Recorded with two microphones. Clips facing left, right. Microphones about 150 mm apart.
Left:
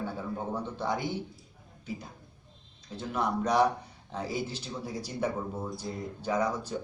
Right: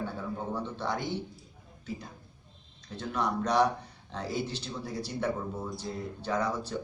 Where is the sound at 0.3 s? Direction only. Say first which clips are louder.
Left 1 dB; 10° left (ahead or behind).